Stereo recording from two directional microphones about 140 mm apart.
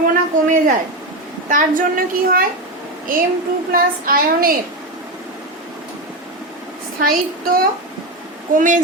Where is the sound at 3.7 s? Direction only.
90° right.